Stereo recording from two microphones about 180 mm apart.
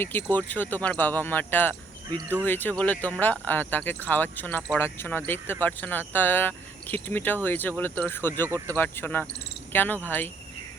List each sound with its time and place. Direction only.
0.0 s speech: 10° left (ahead or behind)
8.4 s speech: 15° right (ahead or behind)
8.7 s speech: 10° left (ahead or behind)